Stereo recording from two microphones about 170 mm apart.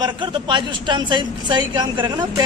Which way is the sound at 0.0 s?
25° right (ahead or behind).